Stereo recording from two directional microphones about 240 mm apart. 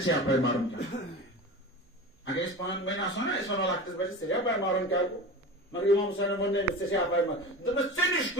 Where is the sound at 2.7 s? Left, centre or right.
Left.